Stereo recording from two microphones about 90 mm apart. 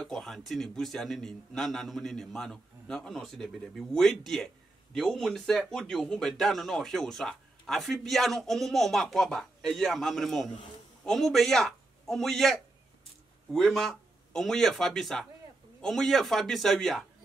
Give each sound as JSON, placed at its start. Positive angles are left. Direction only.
{"t": 0.0, "sound": "a man's voice", "side_deg": 5}